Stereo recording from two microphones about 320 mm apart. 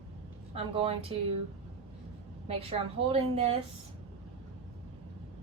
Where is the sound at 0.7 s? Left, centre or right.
Centre.